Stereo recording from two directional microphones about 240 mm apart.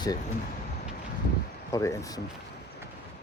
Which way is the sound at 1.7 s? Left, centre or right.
Centre.